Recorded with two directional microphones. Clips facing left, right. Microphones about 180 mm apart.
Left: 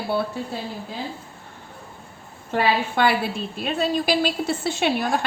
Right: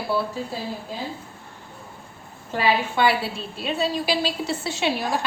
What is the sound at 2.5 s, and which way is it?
A woman's voice, 55° left (ahead or behind).